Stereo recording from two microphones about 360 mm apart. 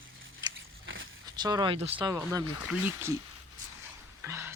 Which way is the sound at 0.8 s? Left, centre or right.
Right.